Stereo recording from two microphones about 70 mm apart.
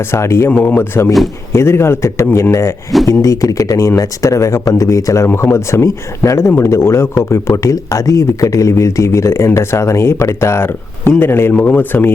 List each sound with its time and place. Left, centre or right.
0.1 s speech: left
0.5 s speech: left
0.8 s speech: left
11.5 s speech: left